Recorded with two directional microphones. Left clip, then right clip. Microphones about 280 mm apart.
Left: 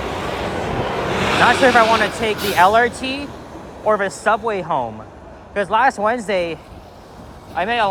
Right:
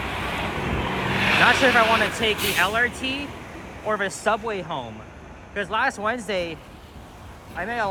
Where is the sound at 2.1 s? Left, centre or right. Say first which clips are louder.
Left 3 dB; centre.